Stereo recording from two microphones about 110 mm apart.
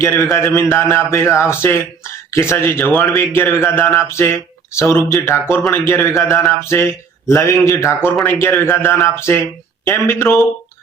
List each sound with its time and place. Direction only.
0.0 s speech: 25° left (ahead or behind)